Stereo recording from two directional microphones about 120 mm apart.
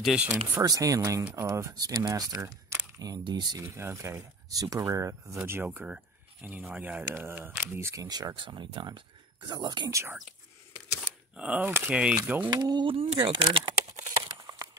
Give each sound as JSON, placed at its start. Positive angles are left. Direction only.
{"t": 0.0, "sound": "speech", "side_deg": -5}
{"t": 0.6, "sound": "speech", "side_deg": -30}
{"t": 3.6, "sound": "speech", "side_deg": -20}
{"t": 5.4, "sound": "speech", "side_deg": -15}
{"t": 11.3, "sound": "speech", "side_deg": -10}
{"t": 12.4, "sound": "speech", "side_deg": -35}
{"t": 12.8, "sound": "speech", "side_deg": -50}